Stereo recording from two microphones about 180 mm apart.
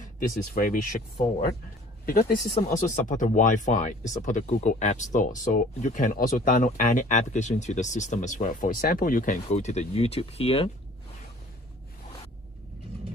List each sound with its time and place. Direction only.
0.6 s speech: 50° left (ahead or behind)
2.0 s speech: 55° left (ahead or behind); by 10.7 s 30° left (ahead or behind)